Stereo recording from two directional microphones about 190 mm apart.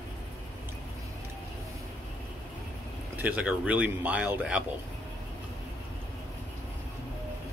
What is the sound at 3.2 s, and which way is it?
A man's voice, 10° right (ahead or behind).